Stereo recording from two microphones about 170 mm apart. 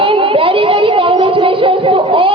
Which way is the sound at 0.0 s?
30° right (ahead or behind).